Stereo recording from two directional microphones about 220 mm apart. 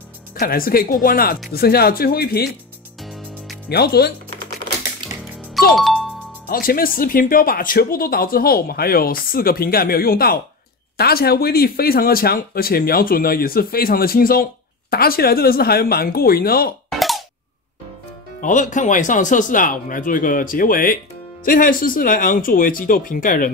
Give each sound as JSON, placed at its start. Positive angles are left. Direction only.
{"t": 0.4, "sound": "speech", "side_deg": 40}
{"t": 3.0, "sound": "music", "side_deg": 0}
{"t": 3.6, "sound": "speech", "side_deg": 45}
{"t": 5.8, "sound": "music", "side_deg": 0}
{"t": 6.5, "sound": "speech", "side_deg": 40}
{"t": 18.4, "sound": "speech", "side_deg": 35}